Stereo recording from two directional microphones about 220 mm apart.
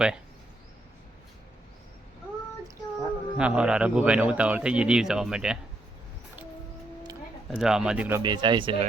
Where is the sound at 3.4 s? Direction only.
5° right (ahead or behind).